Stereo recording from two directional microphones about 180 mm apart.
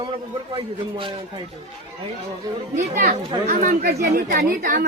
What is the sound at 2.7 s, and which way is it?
Speech, 45° right (ahead or behind).